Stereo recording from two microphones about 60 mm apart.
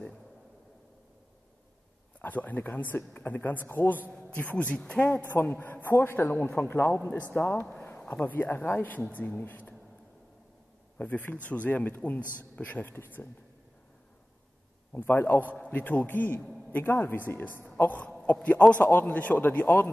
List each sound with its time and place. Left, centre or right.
2.2 s a man's voice: left
5.0 s a man's voice: left
7.0 s speech: left
7.3 s speech: left
7.7 s a sound: left
8.0 s speech: left
11.0 s a man's voice: left
15.0 s a man's voice: left
15.5 s a man's voice: left
17.8 s a man's voice: left